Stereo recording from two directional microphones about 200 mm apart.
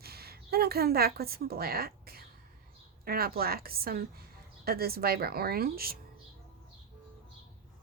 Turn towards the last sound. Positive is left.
turn(degrees=-50)  # may be behind; listen again after turning